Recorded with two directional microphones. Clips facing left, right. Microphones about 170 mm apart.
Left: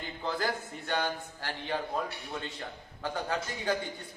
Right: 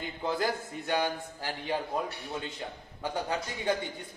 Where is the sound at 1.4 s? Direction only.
10° right (ahead or behind).